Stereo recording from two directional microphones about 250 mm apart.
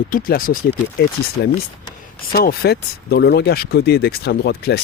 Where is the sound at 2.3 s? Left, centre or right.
Left.